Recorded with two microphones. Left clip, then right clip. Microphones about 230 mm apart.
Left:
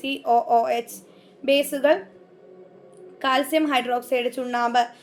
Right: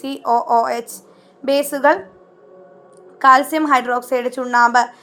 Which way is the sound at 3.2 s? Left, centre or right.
Right.